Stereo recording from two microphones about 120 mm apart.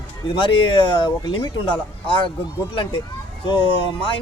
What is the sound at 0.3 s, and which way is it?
Speech, 45° left (ahead or behind).